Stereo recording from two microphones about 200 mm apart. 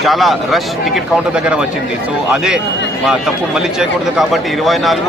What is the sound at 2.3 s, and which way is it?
Speech, 5° right (ahead or behind).